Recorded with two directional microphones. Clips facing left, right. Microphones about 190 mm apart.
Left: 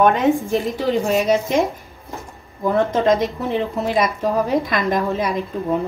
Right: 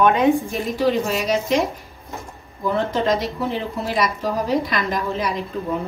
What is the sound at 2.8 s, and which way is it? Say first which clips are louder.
A woman's voice: left 4 dB; 55° left (ahead or behind).